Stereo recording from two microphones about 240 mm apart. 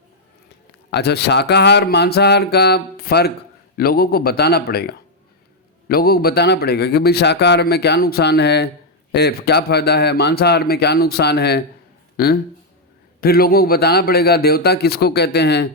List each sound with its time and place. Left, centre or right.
0.9 s a man's voice: left